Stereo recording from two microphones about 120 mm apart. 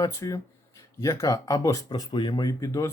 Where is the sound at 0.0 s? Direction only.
25° left (ahead or behind).